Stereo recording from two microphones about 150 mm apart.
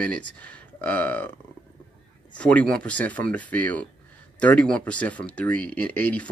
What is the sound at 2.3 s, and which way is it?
Speech, 5° left (ahead or behind).